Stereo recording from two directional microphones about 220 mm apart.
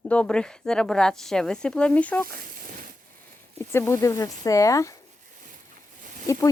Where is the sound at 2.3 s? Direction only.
40° right (ahead or behind).